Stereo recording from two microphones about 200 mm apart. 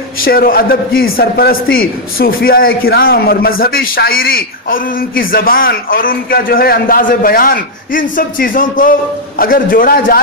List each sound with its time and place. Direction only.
0.2 s a man's voice: 45° left (ahead or behind)